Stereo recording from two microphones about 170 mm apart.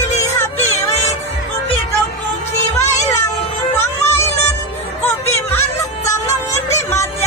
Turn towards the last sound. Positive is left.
turn(degrees=15)  # may be behind; listen again after turning